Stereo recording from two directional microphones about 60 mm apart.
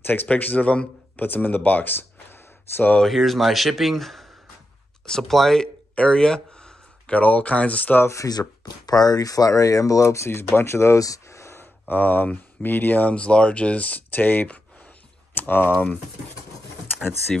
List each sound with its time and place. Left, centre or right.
0.0 s speech: left
3.0 s speech: centre
5.0 s a sound: centre
7.2 s speech: left
8.1 s speech: left
8.8 s speech: left
11.0 s a sound: left
11.9 s speech: left
13.1 s speech: centre